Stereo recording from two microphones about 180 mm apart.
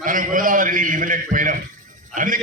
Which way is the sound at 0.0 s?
50° right (ahead or behind).